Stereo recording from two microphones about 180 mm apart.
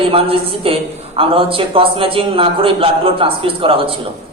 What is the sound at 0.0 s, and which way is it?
A man's voice, 30° right (ahead or behind).